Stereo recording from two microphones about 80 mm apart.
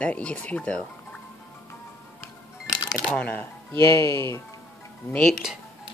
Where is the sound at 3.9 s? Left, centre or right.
Left.